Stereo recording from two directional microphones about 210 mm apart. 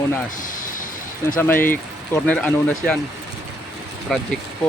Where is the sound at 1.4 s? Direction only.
10° left (ahead or behind).